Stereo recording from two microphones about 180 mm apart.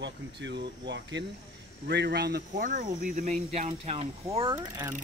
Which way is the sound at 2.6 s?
45° right (ahead or behind).